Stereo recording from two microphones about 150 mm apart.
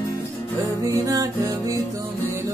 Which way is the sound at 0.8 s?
20° right (ahead or behind).